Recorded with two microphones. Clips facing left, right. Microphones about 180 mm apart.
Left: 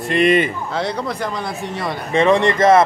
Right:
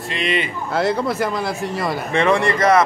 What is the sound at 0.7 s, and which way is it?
Speech, 5° right (ahead or behind).